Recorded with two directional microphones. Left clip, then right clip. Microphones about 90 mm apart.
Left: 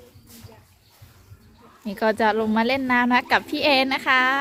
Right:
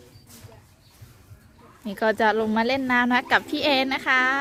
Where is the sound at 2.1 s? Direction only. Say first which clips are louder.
Even; 20° right (ahead or behind).